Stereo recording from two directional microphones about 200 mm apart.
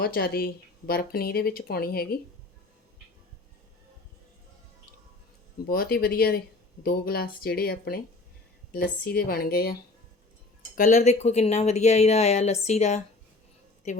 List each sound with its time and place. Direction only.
0.0 s speech: 50° left (ahead or behind)
5.6 s speech: 50° left (ahead or behind)
10.8 s speech: 35° left (ahead or behind)